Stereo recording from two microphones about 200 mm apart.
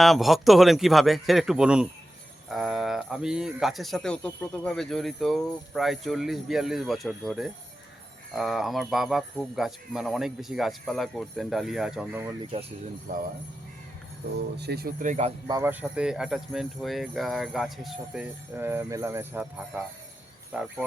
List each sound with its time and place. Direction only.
0.0 s speech: centre (ahead or behind)
12.4 s speech: 25° right (ahead or behind)
13.1 s speech: 45° right (ahead or behind)
14.6 s speech: 50° right (ahead or behind)
15.4 s speech: 15° right (ahead or behind)